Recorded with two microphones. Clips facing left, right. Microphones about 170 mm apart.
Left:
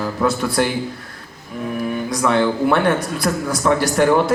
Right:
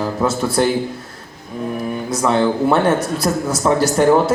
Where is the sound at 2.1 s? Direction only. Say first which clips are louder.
Right 1 dB; 25° right (ahead or behind).